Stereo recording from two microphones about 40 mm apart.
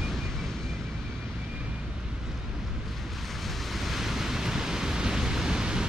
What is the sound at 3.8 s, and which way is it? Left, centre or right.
Pink noise, centre.